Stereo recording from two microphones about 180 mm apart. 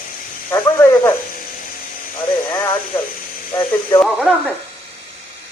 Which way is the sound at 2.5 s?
15° left (ahead or behind).